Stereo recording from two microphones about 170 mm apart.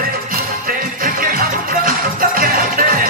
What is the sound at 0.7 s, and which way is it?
Music, 55° right (ahead or behind).